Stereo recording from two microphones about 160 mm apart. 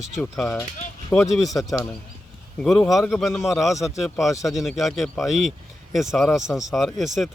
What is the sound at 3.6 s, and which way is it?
Speech, 20° left (ahead or behind).